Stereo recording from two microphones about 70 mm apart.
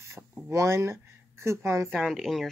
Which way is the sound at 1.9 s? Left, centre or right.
Centre.